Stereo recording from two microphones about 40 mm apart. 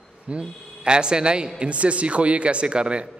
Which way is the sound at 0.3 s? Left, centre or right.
Right.